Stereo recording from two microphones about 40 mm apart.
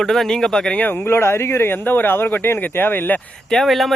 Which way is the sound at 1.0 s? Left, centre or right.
Left.